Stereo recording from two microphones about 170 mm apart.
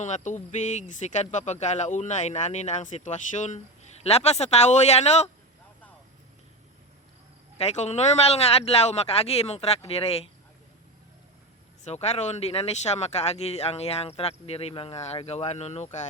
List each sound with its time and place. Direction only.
0.0 s speech: 45° left (ahead or behind)
7.6 s speech: 40° left (ahead or behind)
11.8 s speech: 40° left (ahead or behind)